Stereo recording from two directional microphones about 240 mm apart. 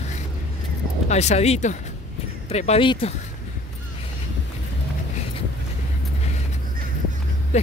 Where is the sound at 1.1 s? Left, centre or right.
Left.